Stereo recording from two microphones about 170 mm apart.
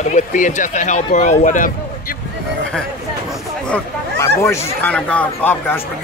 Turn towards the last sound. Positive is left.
turn(degrees=10)  # may be behind; listen again after turning